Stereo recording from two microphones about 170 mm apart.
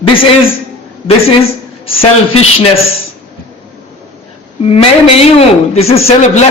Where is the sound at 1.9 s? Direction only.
35° left (ahead or behind).